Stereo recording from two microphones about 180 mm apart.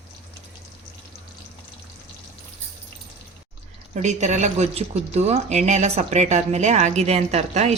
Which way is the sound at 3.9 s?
40° right (ahead or behind).